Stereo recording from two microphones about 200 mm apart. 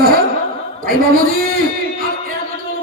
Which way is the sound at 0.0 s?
50° right (ahead or behind).